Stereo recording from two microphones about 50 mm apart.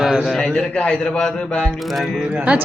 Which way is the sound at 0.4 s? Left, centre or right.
Centre.